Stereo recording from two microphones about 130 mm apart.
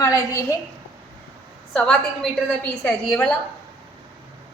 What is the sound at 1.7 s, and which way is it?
A woman's voice, 10° left (ahead or behind).